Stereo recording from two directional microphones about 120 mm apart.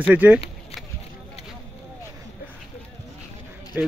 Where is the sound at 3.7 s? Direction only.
15° right (ahead or behind).